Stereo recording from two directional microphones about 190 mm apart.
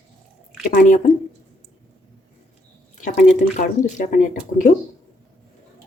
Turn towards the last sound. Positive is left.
turn(degrees=40)  # may be behind; listen again after turning